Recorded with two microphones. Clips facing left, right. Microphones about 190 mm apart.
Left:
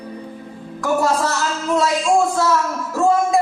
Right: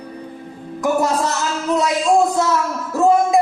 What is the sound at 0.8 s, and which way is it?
Music, 20° right (ahead or behind).